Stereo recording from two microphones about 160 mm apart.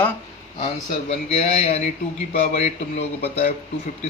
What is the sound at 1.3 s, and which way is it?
A man's voice, 40° left (ahead or behind).